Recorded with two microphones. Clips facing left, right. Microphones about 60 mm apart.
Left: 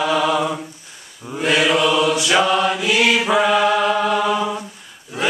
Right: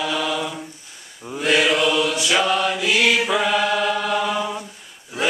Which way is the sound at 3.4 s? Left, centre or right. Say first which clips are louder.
Left 4 dB; centre.